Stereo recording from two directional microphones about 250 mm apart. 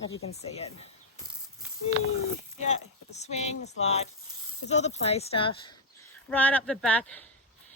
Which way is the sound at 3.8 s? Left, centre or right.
Left.